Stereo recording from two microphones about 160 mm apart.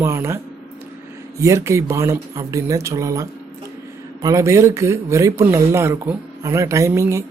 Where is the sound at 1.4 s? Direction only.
15° right (ahead or behind).